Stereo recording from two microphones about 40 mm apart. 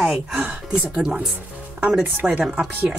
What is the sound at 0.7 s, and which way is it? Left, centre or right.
Speech, right.